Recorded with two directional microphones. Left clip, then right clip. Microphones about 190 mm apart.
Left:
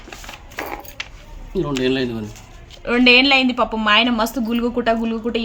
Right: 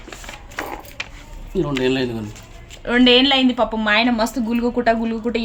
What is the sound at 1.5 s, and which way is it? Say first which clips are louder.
Speech: even; 5° right (ahead or behind).